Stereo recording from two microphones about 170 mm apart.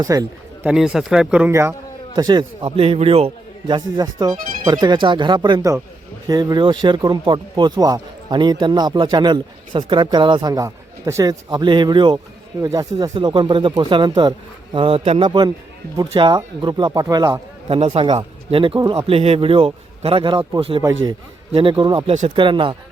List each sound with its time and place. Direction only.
0.0 s speech: 20° right (ahead or behind)
0.7 s a man's voice: 5° right (ahead or behind)
2.1 s speech: 25° right (ahead or behind)
19.0 s a man's voice: 35° right (ahead or behind)